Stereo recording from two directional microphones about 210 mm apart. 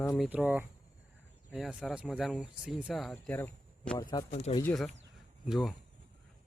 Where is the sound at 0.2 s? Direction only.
5° right (ahead or behind).